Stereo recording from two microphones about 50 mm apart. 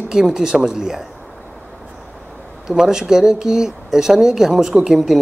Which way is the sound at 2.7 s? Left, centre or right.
Centre.